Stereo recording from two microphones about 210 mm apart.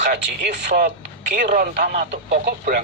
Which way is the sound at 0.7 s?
40° right (ahead or behind).